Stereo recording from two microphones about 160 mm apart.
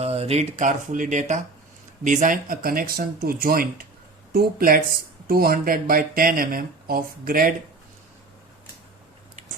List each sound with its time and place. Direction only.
0.0 s speech: 40° right (ahead or behind); by 7.5 s 60° right (ahead or behind)